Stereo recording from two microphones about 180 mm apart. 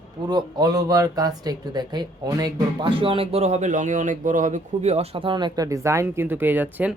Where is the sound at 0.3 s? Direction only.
25° right (ahead or behind).